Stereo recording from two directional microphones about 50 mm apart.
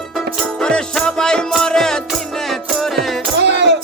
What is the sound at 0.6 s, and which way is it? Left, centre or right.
Music, centre.